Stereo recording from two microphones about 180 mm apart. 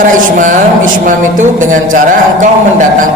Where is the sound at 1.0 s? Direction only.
45° right (ahead or behind).